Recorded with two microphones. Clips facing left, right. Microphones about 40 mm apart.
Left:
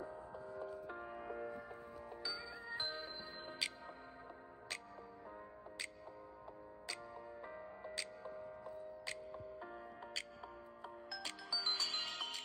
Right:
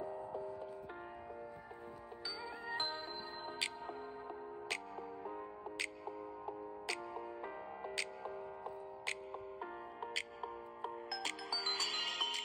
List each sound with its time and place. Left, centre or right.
0.4 s music: centre
2.7 s music: centre
8.6 s music: right
11.5 s music: right